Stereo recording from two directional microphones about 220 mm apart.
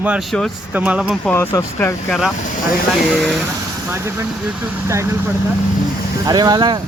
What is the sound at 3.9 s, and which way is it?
Speech, 10° right (ahead or behind).